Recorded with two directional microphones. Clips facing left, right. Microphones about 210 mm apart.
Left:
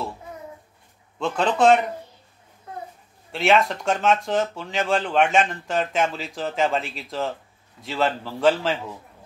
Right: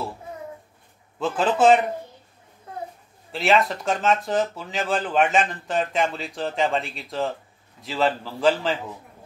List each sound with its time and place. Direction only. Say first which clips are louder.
1.2 s speech: even; 5° right (ahead or behind)
3.3 s speech: left 1 dB; centre (ahead or behind)